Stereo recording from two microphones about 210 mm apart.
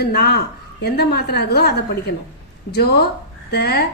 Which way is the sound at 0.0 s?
50° left (ahead or behind).